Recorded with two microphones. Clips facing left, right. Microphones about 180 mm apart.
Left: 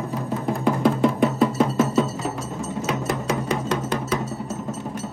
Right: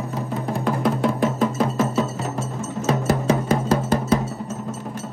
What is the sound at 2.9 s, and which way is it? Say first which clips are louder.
Music: right 6 dB; 35° right (ahead or behind).